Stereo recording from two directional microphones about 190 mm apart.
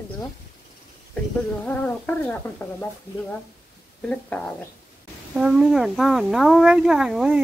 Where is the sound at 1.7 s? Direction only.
10° left (ahead or behind).